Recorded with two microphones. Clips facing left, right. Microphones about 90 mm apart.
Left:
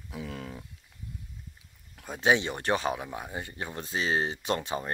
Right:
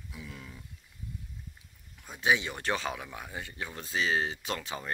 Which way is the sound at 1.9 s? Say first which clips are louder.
Left 3 dB; 45° left (ahead or behind).